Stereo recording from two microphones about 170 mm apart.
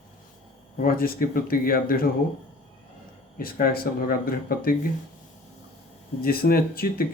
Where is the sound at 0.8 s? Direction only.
60° left (ahead or behind).